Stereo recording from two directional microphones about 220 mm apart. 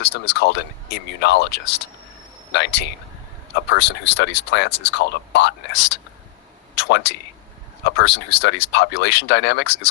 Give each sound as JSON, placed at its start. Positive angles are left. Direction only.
{"t": 0.0, "sound": "speech", "side_deg": 50}